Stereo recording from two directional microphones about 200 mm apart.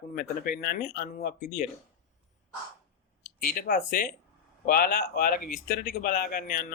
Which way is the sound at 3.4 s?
45° left (ahead or behind).